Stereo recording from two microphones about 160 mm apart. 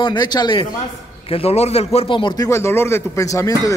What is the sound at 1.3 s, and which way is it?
A man's voice, 40° left (ahead or behind).